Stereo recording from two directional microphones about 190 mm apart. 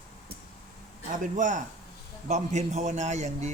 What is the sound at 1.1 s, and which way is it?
Speech, 40° right (ahead or behind).